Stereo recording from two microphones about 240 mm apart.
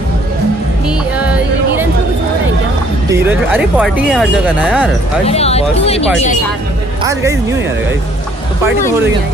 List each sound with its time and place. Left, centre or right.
0.8 s music: centre
3.1 s speech: centre
5.2 s speech: left